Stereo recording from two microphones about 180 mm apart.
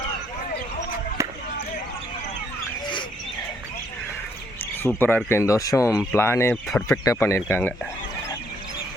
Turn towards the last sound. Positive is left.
turn(degrees=15)  # may be behind; listen again after turning